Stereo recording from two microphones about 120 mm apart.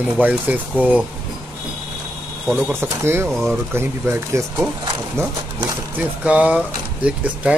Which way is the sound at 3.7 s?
20° right (ahead or behind).